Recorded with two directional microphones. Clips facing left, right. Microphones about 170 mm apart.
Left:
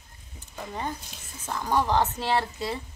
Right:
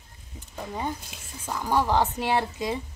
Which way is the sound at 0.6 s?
10° right (ahead or behind).